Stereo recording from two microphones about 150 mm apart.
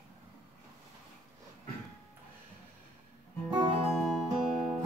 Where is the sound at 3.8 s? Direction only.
Centre (ahead or behind).